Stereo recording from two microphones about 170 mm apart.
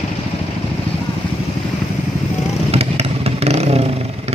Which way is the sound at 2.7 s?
35° right (ahead or behind).